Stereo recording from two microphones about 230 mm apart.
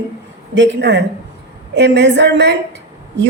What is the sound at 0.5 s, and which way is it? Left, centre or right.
A woman's voice, right.